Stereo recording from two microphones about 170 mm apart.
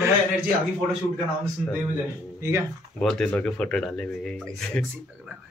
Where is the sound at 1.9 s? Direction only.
15° right (ahead or behind).